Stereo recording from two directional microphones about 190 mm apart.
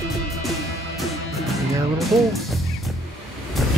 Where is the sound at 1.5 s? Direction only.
Centre (ahead or behind).